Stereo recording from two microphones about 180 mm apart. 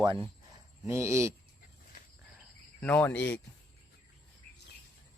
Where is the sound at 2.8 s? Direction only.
10° left (ahead or behind).